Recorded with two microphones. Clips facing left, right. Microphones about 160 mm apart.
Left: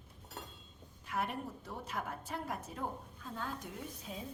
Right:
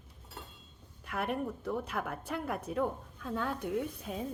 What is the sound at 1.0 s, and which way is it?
A woman's voice, 60° right (ahead or behind).